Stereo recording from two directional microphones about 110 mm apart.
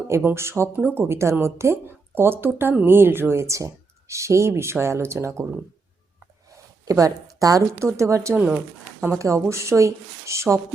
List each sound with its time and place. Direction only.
0.3 s a woman's voice: 25° right (ahead or behind)
6.5 s a woman's voice: 30° right (ahead or behind)
8.4 s speech: 5° right (ahead or behind)
9.1 s a woman's voice: 25° right (ahead or behind)